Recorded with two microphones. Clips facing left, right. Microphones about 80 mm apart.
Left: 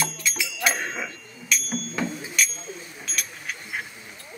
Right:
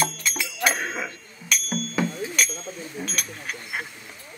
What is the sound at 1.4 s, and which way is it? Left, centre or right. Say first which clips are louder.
Music: right 1 dB; right.